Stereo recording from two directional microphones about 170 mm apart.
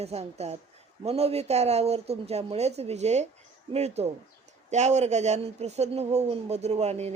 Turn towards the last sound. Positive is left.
turn(degrees=-40)  # may be behind; listen again after turning